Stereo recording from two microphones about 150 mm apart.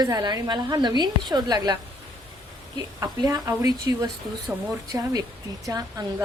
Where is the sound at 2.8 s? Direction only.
25° right (ahead or behind).